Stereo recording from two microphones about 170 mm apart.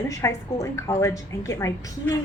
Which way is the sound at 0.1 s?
20° left (ahead or behind).